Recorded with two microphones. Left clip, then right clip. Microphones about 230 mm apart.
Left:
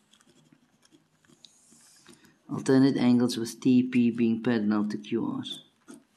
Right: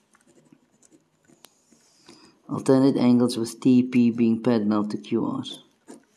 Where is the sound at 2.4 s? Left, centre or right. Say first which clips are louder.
Right 4 dB; centre.